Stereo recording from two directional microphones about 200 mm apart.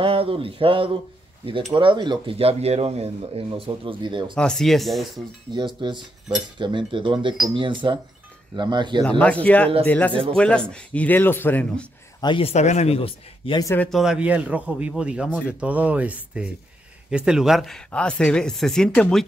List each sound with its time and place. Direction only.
0.0 s speech: 25° right (ahead or behind)
4.4 s speech: 5° left (ahead or behind)
5.8 s speech: 20° right (ahead or behind)
9.2 s speech: 5° left (ahead or behind)
12.2 s speech: 25° left (ahead or behind)
13.7 s speech: centre (ahead or behind)